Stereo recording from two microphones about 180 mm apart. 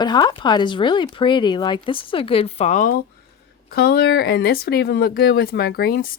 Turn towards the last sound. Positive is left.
turn(degrees=55)  # may be behind; listen again after turning